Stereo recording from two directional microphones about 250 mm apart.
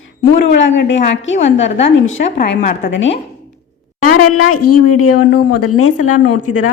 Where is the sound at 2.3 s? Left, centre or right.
Left.